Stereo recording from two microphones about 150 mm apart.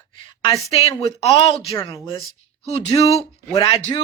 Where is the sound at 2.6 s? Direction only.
45° left (ahead or behind).